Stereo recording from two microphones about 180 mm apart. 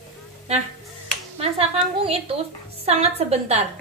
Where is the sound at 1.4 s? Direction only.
35° right (ahead or behind).